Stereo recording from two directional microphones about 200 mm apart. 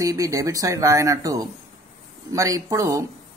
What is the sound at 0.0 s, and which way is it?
Speech, 15° right (ahead or behind).